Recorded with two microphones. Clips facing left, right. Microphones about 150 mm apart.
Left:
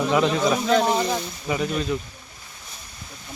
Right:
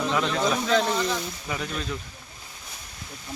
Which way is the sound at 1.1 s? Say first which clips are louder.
Left 4 dB; 15° left (ahead or behind).